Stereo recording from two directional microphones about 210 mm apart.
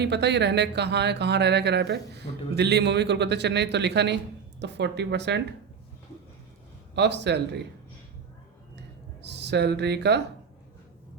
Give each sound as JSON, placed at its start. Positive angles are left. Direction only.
{"t": 0.0, "sound": "speech", "side_deg": -55}
{"t": 6.9, "sound": "speech", "side_deg": -55}
{"t": 9.2, "sound": "speech", "side_deg": -55}